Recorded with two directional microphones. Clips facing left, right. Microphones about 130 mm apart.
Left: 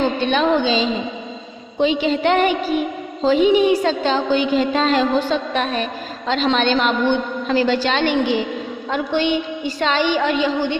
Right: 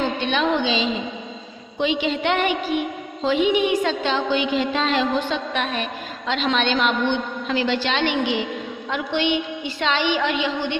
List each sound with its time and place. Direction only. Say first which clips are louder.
0.0 s a woman's voice: left 4 dB; 40° left (ahead or behind)